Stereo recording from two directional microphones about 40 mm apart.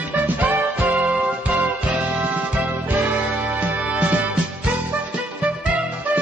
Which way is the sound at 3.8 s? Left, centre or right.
Right.